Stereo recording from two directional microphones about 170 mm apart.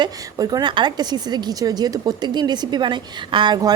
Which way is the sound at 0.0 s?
25° right (ahead or behind).